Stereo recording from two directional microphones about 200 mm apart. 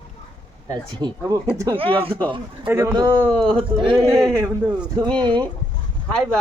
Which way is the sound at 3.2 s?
5° left (ahead or behind).